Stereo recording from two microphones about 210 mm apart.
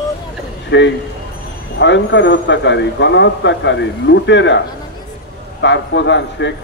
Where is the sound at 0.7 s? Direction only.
60° left (ahead or behind).